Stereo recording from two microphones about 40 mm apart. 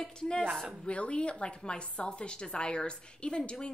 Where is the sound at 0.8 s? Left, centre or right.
Left.